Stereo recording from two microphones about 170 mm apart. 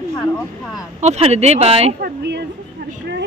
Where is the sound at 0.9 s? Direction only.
40° right (ahead or behind).